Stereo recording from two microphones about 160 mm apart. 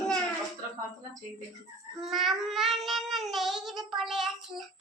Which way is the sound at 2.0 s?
Centre (ahead or behind).